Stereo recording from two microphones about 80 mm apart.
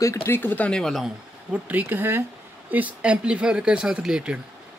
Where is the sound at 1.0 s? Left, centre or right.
Centre.